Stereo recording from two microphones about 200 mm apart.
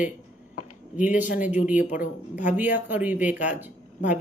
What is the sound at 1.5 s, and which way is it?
Speech, 10° right (ahead or behind).